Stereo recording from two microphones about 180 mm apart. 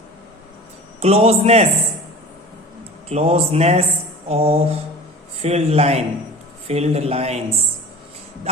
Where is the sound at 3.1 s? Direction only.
35° right (ahead or behind).